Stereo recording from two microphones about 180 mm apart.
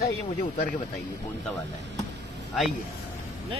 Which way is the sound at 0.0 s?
60° left (ahead or behind).